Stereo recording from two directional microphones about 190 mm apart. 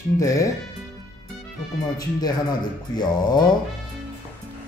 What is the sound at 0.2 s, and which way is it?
Speech, 15° left (ahead or behind).